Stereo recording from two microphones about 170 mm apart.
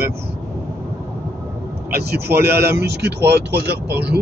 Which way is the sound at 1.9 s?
65° right (ahead or behind).